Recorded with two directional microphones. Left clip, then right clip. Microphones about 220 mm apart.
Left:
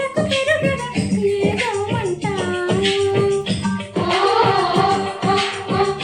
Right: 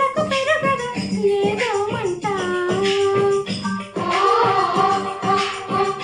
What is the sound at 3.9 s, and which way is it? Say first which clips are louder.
Music: left 1 dB; 50° left (ahead or behind).